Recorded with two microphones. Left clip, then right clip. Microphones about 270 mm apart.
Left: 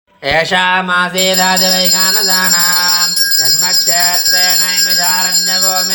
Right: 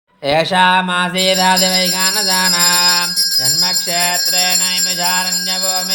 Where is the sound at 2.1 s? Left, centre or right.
Right.